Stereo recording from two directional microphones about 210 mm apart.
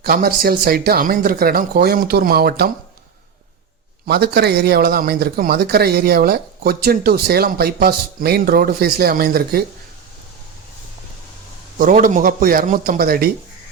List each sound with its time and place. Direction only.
0.0 s speech: 45° right (ahead or behind)
4.0 s speech: 50° right (ahead or behind)
11.8 s speech: 40° right (ahead or behind)